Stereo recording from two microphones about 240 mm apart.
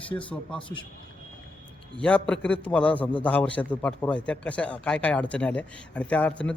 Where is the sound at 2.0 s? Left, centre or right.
Centre.